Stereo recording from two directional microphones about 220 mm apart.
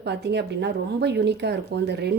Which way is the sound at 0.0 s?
50° right (ahead or behind).